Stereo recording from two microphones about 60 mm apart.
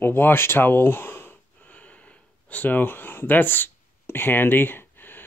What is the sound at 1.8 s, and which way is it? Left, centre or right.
Gasp, left.